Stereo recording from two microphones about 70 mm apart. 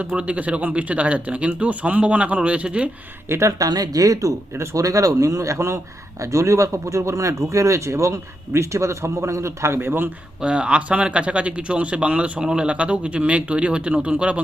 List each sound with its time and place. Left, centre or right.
0.0 s speech: centre
3.2 s speech: right
3.6 s speech: right
10.4 s speech: centre